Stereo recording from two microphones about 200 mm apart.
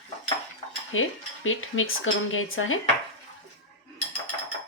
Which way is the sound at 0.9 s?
90° left.